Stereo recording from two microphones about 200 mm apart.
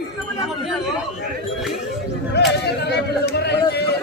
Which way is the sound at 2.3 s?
55° left (ahead or behind).